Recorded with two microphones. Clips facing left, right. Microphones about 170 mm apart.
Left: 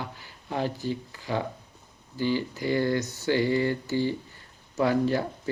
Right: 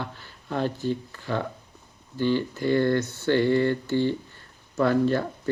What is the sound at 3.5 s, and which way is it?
Speech, 60° right (ahead or behind).